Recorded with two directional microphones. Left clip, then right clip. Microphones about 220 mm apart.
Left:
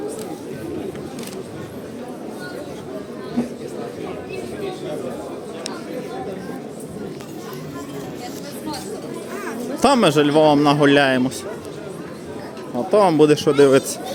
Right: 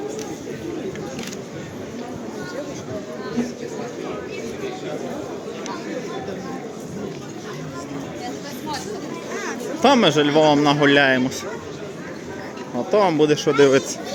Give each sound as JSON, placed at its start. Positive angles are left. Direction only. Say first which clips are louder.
{"t": 9.8, "sound": "a man's voice", "louder": "even", "side_deg": 20}
{"t": 12.9, "sound": "a man's voice", "louder": "left 3 dB", "side_deg": 15}